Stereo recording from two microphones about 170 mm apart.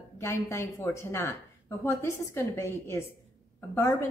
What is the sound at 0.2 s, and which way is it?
A woman's voice, 15° left (ahead or behind).